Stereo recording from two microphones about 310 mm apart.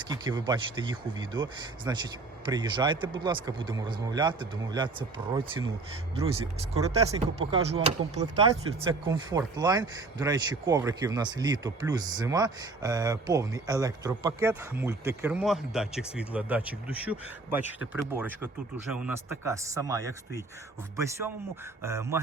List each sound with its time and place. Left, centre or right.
0.1 s speech: centre